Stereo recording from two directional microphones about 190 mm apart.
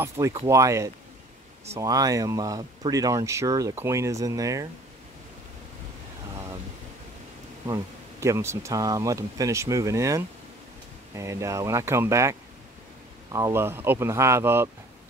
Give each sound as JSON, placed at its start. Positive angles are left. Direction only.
{"t": 0.0, "sound": "speech", "side_deg": -15}
{"t": 7.6, "sound": "speech", "side_deg": -20}